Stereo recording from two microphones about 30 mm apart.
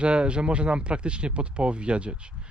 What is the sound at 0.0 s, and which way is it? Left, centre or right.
Speech, right.